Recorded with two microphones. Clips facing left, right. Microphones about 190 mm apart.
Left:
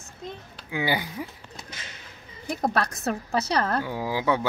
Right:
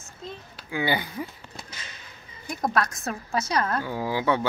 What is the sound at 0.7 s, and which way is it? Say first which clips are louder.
Speech: even; 15° left (ahead or behind).